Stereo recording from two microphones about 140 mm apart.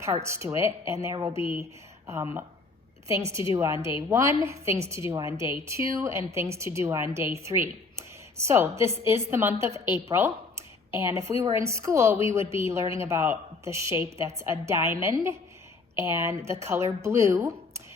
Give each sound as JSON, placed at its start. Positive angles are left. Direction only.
{"t": 0.0, "sound": "a woman's voice", "side_deg": -20}
{"t": 2.1, "sound": "a woman's voice", "side_deg": -15}